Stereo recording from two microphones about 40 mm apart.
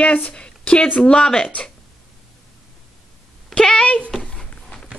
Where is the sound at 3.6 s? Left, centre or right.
Centre.